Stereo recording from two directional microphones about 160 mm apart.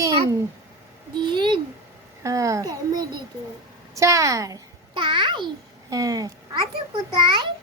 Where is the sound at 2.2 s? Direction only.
20° right (ahead or behind).